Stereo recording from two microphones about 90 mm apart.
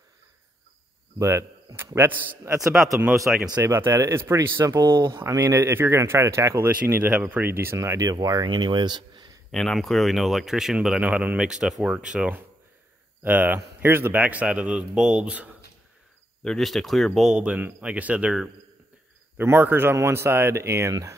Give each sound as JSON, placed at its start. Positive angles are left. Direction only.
{"t": 1.1, "sound": "speech", "side_deg": -35}
{"t": 2.0, "sound": "speech", "side_deg": -25}
{"t": 2.6, "sound": "speech", "side_deg": 0}
{"t": 3.6, "sound": "speech", "side_deg": -30}
{"t": 8.1, "sound": "speech", "side_deg": -45}
{"t": 9.5, "sound": "speech", "side_deg": 5}
{"t": 13.2, "sound": "speech", "side_deg": -20}
{"t": 16.4, "sound": "speech", "side_deg": 0}
{"t": 19.3, "sound": "speech", "side_deg": -25}